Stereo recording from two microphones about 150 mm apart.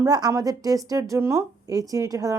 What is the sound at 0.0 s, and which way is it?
Speech, 25° right (ahead or behind).